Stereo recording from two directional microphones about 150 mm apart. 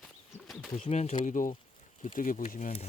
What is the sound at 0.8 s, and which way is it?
Speech, 45° left (ahead or behind).